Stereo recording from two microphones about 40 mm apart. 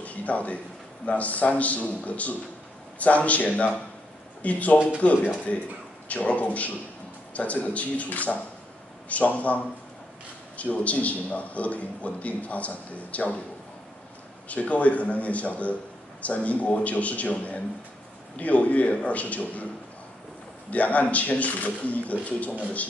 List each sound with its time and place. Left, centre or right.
0.0 s a sound: left
1.0 s a man's voice: left
10.6 s a man's voice: left
14.5 s a man's voice: left
20.7 s a man's voice: left